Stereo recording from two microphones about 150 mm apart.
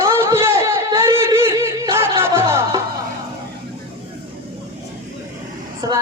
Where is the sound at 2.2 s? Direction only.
20° right (ahead or behind).